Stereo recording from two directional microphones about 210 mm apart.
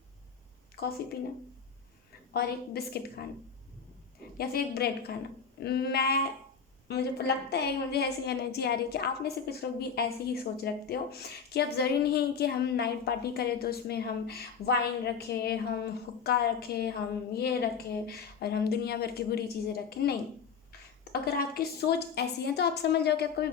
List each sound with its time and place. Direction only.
0.8 s a woman's voice: 45° left (ahead or behind)
2.3 s a woman's voice: 50° left (ahead or behind)
4.4 s a woman's voice: 50° left (ahead or behind)